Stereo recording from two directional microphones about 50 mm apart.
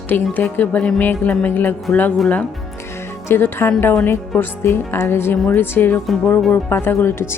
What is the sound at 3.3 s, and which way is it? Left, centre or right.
Speech, left.